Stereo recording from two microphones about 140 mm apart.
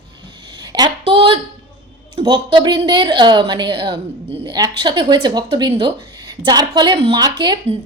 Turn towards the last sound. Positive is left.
turn(degrees=-30)  # may be behind; listen again after turning